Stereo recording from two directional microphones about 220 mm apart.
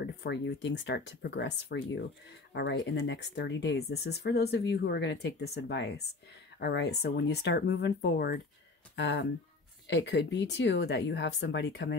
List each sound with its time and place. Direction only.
0.0 s speech: 50° left (ahead or behind)